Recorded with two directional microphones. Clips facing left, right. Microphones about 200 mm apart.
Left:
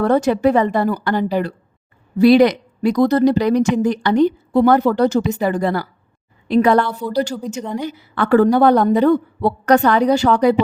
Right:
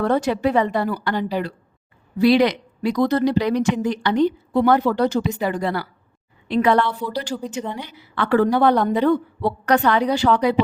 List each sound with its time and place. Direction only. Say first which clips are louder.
0.0 s a woman's voice: left 5 dB; 45° left (ahead or behind)